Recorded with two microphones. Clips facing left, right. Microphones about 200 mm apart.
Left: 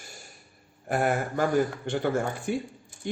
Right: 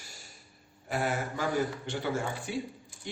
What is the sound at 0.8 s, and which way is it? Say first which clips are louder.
A man's voice: left 5 dB; 55° left (ahead or behind).